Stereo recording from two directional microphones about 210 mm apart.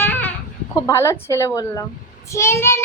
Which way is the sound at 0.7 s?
15° left (ahead or behind).